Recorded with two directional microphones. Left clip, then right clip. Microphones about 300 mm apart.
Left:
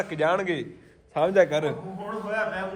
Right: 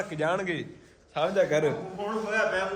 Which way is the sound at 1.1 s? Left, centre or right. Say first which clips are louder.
Left 5 dB; left.